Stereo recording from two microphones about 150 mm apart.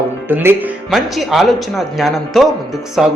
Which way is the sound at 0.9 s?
Centre (ahead or behind).